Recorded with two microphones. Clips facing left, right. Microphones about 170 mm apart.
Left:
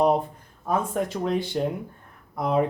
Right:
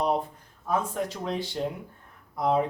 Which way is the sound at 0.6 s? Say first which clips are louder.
Left 3 dB; 50° left (ahead or behind).